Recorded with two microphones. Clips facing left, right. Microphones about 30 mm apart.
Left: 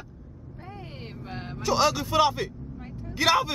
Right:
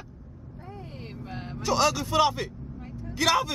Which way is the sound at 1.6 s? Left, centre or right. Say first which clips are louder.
Left 1 dB; centre.